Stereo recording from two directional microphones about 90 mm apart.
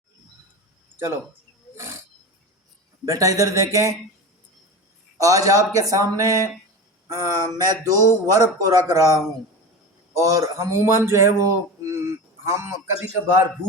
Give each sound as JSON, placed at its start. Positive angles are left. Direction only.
{"t": 0.9, "sound": "speech", "side_deg": -35}
{"t": 1.7, "sound": "wild animals", "side_deg": -30}
{"t": 3.1, "sound": "speech", "side_deg": -40}
{"t": 5.1, "sound": "speech", "side_deg": -40}
{"t": 11.8, "sound": "a sound", "side_deg": -35}